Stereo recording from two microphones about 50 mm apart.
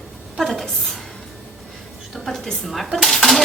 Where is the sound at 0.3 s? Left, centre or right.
Centre.